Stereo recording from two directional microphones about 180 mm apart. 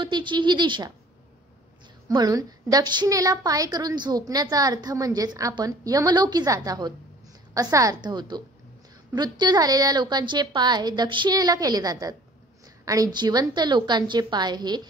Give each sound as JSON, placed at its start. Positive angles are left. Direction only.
{"t": 0.0, "sound": "speech", "side_deg": -25}
{"t": 2.0, "sound": "a woman's voice", "side_deg": -20}